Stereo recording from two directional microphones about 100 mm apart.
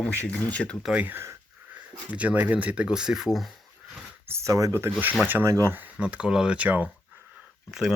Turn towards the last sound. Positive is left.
turn(degrees=-10)  # may be behind; listen again after turning